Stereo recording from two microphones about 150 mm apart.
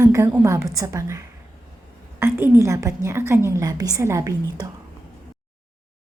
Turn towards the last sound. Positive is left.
turn(degrees=-20)  # may be behind; listen again after turning